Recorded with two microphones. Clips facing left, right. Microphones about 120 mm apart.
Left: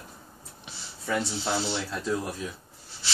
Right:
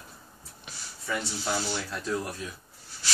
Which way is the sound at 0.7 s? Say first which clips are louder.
Left 3 dB; 25° left (ahead or behind).